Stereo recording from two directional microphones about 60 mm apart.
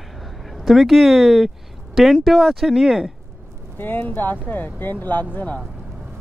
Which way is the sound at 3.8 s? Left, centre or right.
Left.